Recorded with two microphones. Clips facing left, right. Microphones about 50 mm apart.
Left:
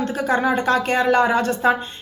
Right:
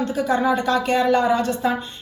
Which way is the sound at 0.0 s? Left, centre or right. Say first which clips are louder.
Even; left.